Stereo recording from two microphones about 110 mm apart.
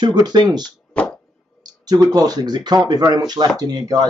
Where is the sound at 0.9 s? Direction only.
10° left (ahead or behind).